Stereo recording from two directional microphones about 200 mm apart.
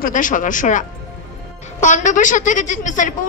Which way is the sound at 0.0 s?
40° left (ahead or behind).